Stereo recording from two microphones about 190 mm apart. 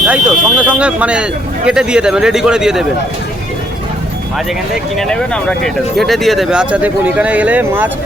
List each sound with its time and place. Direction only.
0.0 s speech: 5° right (ahead or behind)
4.9 s speech: 5° left (ahead or behind)